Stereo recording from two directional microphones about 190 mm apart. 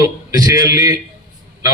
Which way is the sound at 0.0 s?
20° right (ahead or behind).